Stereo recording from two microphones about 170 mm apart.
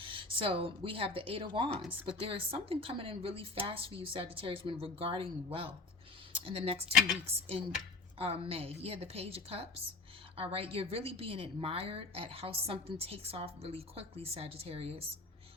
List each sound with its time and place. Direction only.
0.0 s a woman's voice: 30° right (ahead or behind)